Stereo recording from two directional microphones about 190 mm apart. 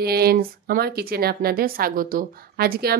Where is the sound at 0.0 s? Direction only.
55° right (ahead or behind).